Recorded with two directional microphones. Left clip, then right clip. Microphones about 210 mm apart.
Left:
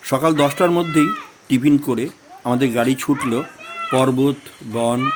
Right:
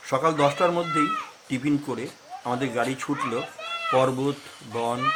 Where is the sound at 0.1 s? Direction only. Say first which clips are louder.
Left 5 dB; 50° left (ahead or behind).